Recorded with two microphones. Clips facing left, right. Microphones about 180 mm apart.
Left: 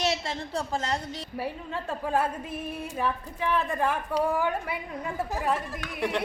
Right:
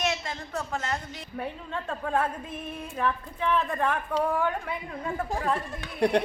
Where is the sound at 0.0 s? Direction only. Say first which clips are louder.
Left 2 dB; 30° left (ahead or behind).